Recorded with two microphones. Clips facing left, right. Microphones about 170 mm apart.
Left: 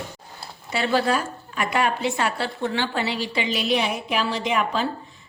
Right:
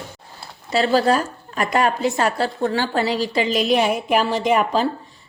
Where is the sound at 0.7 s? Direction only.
35° right (ahead or behind).